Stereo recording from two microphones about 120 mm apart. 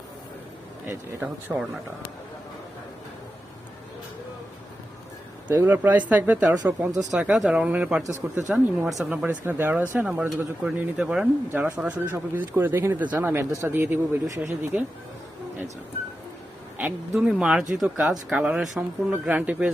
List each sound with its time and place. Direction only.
0.9 s speech: 20° right (ahead or behind)
5.5 s speech: 15° right (ahead or behind)
16.7 s speech: 10° right (ahead or behind)